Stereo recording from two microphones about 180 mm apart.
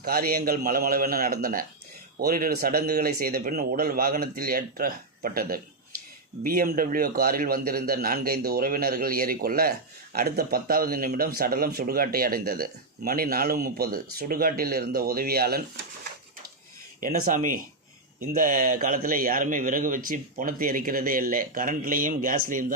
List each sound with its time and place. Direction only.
0.0 s a man's voice: 55° right (ahead or behind)
17.0 s a man's voice: 50° right (ahead or behind)